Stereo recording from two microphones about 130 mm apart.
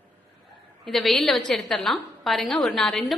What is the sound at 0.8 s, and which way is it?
A woman's voice, centre (ahead or behind).